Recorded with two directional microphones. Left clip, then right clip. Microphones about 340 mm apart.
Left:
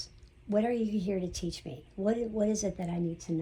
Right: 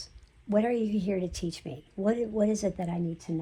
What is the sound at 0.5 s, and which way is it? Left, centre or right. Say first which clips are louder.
A woman's voice: right 3 dB; right.